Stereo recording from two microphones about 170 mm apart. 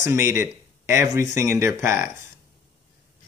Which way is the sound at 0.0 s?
15° right (ahead or behind).